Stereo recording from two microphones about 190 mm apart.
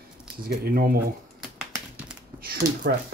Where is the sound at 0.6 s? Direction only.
50° right (ahead or behind).